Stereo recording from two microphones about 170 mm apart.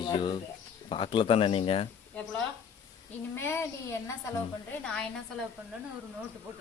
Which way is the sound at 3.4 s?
15° left (ahead or behind).